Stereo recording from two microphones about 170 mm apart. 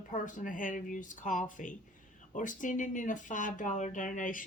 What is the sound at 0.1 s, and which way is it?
Speech, 50° left (ahead or behind).